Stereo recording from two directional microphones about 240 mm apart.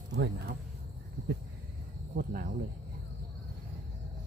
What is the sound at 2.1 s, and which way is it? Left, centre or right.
Cricket, right.